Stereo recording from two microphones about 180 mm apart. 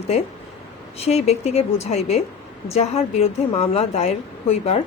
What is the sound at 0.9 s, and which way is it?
A woman's voice, 35° left (ahead or behind).